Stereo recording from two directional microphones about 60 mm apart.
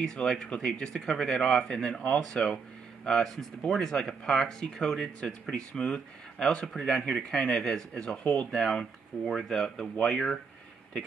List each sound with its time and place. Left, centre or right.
0.1 s speech: centre
8.2 s speech: left
8.5 s speech: centre